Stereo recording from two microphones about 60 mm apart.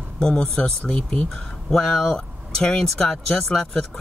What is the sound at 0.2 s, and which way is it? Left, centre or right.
Speech, centre.